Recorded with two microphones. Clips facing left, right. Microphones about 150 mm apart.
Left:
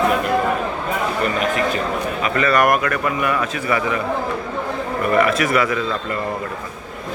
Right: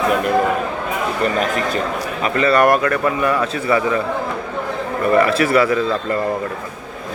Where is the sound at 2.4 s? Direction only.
30° right (ahead or behind).